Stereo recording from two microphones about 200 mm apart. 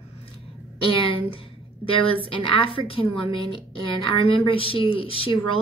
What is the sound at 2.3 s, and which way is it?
A woman's voice, 25° left (ahead or behind).